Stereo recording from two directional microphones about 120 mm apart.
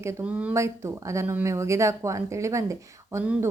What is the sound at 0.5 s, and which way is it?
Speech, 25° right (ahead or behind).